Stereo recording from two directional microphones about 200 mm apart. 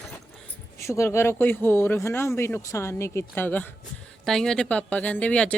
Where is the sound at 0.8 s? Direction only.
15° left (ahead or behind).